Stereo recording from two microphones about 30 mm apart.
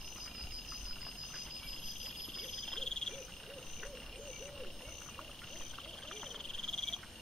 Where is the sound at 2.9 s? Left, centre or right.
Left.